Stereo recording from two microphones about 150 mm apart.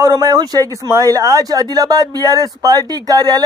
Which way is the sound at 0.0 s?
20° right (ahead or behind).